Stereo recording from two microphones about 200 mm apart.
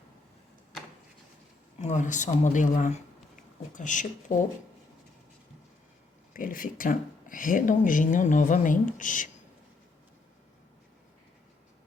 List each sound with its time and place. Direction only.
1.8 s speech: 40° left (ahead or behind)
6.3 s speech: 45° left (ahead or behind)